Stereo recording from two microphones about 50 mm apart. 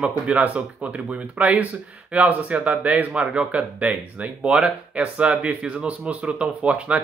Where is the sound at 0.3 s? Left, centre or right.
Right.